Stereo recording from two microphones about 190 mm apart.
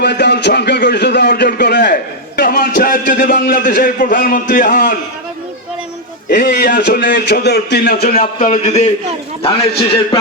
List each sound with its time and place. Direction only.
0.0 s a man's voice: 60° left (ahead or behind); by 4.9 s 45° left (ahead or behind)
6.2 s a man's voice: 50° left (ahead or behind); by 10.2 s 30° left (ahead or behind)